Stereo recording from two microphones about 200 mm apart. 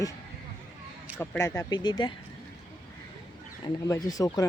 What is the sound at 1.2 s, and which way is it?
Speech, 15° left (ahead or behind).